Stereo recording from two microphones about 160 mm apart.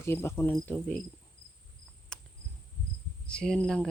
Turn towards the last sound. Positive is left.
turn(degrees=5)  # may be behind; listen again after turning